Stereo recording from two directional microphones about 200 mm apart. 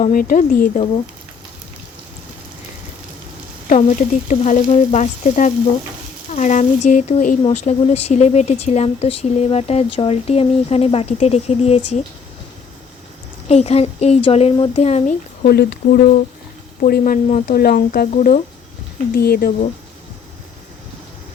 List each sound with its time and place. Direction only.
0.0 s speech: 45° left (ahead or behind)
3.7 s speech: 35° left (ahead or behind)
13.5 s speech: 30° left (ahead or behind)
15.4 s speech: 50° left (ahead or behind)